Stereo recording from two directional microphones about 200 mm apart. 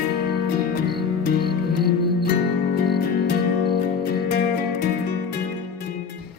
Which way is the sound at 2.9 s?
50° left (ahead or behind).